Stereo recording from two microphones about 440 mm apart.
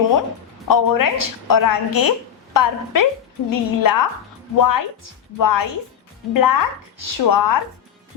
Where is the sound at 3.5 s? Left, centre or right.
Left.